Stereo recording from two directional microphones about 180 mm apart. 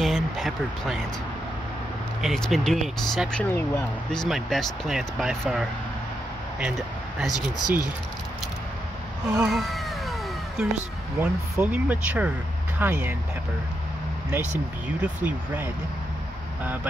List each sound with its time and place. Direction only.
0.0 s a sound: centre (ahead or behind)
2.2 s speech: centre (ahead or behind)
7.3 s speech: 20° left (ahead or behind)
9.3 s cat: 5° right (ahead or behind)
10.6 s speech: 5° right (ahead or behind)
15.0 s speech: 10° right (ahead or behind)